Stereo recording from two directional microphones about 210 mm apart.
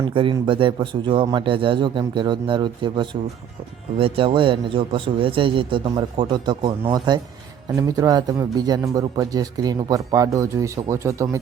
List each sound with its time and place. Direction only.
0.1 s a man's voice: 25° right (ahead or behind)